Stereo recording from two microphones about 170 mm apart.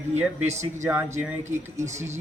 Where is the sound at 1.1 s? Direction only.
45° right (ahead or behind).